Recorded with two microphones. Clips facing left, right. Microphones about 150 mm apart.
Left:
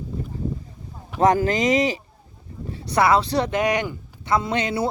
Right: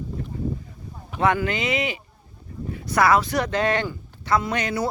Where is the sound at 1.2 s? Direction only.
40° left (ahead or behind).